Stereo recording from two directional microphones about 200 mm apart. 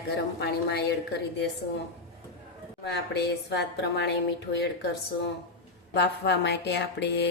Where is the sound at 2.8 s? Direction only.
55° left (ahead or behind).